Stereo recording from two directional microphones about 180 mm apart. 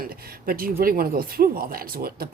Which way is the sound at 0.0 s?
55° right (ahead or behind).